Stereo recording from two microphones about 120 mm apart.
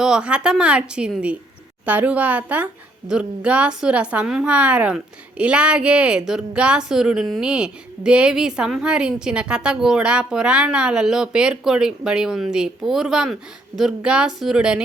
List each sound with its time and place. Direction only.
0.0 s a woman's voice: 5° right (ahead or behind)